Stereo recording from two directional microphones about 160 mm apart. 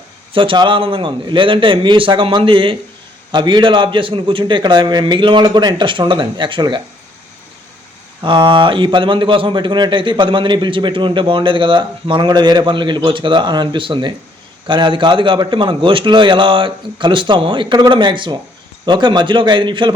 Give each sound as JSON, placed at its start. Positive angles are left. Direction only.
{"t": 0.3, "sound": "a man's voice", "side_deg": -30}
{"t": 8.2, "sound": "a man's voice", "side_deg": -30}